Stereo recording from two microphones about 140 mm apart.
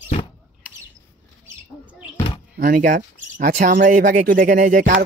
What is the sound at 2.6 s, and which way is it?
Speech, 75° right (ahead or behind).